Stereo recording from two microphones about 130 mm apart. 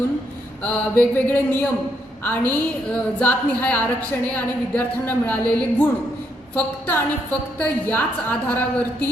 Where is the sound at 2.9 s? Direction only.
15° left (ahead or behind).